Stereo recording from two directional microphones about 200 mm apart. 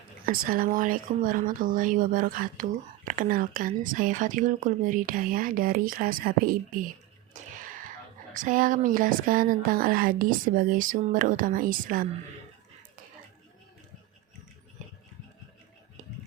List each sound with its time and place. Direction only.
0.3 s speech: 45° right (ahead or behind)
7.3 s a sound: 35° right (ahead or behind)
8.3 s speech: 40° right (ahead or behind)